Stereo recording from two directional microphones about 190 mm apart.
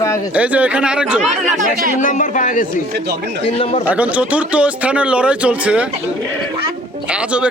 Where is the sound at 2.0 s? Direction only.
40° left (ahead or behind).